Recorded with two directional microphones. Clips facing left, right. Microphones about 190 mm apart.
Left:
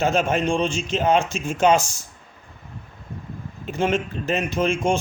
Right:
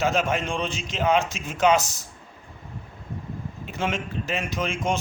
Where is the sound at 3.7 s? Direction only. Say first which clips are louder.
Left 6 dB; 35° left (ahead or behind).